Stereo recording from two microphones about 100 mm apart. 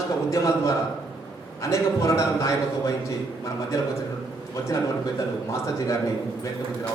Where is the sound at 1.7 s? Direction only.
30° left (ahead or behind).